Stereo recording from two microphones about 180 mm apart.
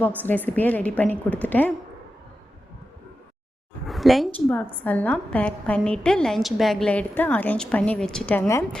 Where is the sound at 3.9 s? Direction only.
Centre (ahead or behind).